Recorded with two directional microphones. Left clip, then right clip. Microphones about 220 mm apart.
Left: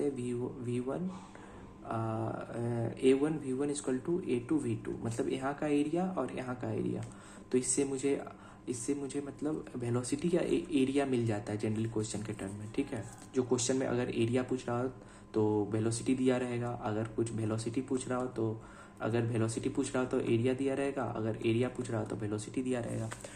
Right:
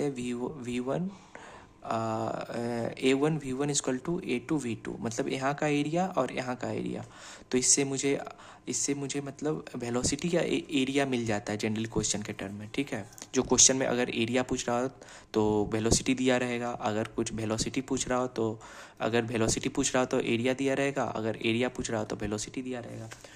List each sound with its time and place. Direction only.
0.0 s speech: 30° right (ahead or behind)
22.5 s speech: 15° right (ahead or behind)